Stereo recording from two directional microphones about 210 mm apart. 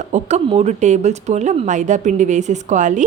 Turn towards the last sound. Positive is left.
turn(degrees=-35)  # may be behind; listen again after turning